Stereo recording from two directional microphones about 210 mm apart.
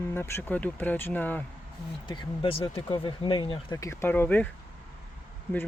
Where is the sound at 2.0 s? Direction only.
20° left (ahead or behind).